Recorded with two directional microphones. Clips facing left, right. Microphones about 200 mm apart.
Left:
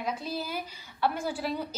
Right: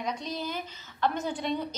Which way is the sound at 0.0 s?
5° left (ahead or behind).